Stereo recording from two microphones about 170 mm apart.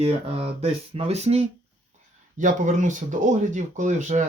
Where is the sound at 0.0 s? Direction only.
35° right (ahead or behind).